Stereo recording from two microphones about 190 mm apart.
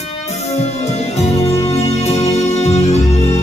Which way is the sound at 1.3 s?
35° left (ahead or behind).